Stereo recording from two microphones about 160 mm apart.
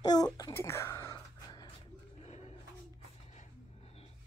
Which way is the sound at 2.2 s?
40° left (ahead or behind).